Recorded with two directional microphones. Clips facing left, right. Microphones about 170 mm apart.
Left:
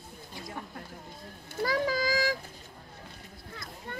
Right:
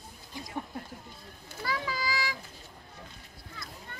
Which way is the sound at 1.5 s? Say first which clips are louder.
Left 6 dB; 45° left (ahead or behind).